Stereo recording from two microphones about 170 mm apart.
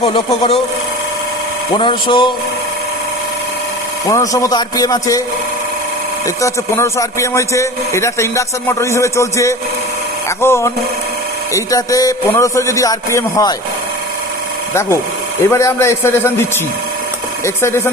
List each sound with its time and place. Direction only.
0.0 s speech: 35° left (ahead or behind)
1.7 s a man's voice: 30° left (ahead or behind)
4.1 s a man's voice: 20° left (ahead or behind)
6.2 s a man's voice: 15° left (ahead or behind)
15.4 s speech: 15° left (ahead or behind)